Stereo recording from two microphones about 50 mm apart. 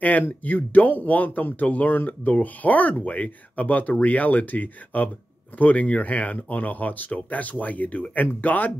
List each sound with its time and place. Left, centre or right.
0.4 s speech: left